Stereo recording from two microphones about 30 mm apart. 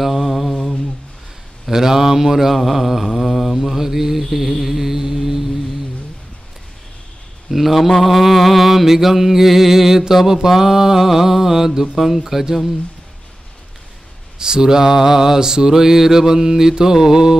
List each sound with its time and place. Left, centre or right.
0.0 s mantra: centre
1.7 s music: centre
3.1 s mantra: centre
7.5 s mantra: centre
8.0 s music: centre
14.4 s mantra: right
15.7 s music: centre